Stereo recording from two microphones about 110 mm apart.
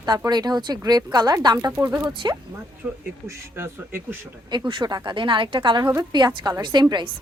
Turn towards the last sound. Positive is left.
turn(degrees=-45)  # may be behind; listen again after turning